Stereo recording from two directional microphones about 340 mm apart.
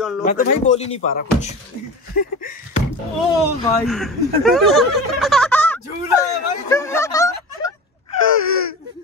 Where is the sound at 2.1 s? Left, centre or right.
Left.